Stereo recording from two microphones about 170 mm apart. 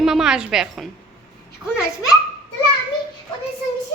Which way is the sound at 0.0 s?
5° right (ahead or behind).